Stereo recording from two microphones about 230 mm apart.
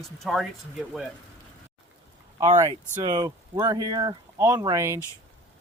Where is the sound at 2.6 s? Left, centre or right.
Centre.